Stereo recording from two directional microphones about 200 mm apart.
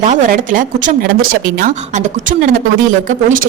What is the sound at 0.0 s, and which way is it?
A woman's voice, 40° right (ahead or behind).